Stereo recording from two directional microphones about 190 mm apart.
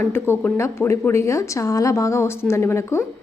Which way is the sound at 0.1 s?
10° left (ahead or behind).